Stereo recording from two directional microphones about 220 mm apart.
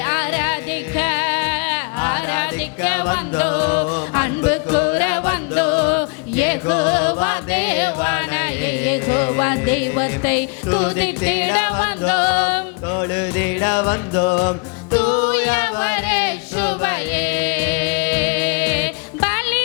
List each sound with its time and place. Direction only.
0.0 s music: 10° left (ahead or behind)
10.9 s music: 10° left (ahead or behind)
15.3 s music: 10° left (ahead or behind)